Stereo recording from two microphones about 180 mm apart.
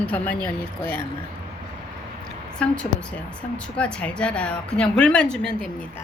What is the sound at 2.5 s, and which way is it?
A woman's voice, 5° left (ahead or behind).